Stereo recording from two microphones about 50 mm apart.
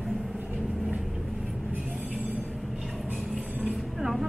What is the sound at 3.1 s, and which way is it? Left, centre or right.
Music, centre.